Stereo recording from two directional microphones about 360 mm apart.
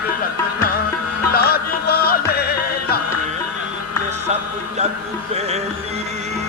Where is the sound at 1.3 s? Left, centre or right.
Left.